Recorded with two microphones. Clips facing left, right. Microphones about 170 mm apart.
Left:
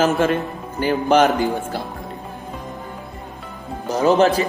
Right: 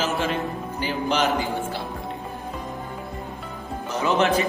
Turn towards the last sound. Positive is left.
turn(degrees=35)  # may be behind; listen again after turning